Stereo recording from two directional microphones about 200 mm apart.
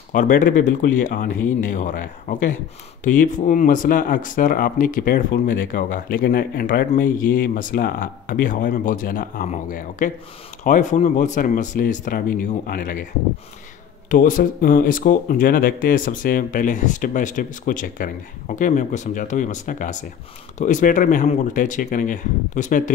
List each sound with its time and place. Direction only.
0.1 s speech: 40° left (ahead or behind)
14.1 s speech: 40° left (ahead or behind)